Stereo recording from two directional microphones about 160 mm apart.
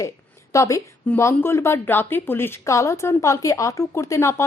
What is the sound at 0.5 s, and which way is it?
A woman's voice, 20° left (ahead or behind).